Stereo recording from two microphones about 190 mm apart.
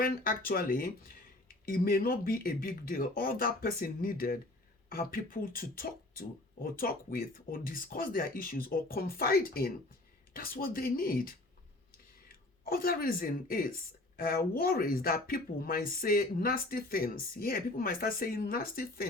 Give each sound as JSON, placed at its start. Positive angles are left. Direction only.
{"t": 0.0, "sound": "speech", "side_deg": 50}
{"t": 12.6, "sound": "speech", "side_deg": 50}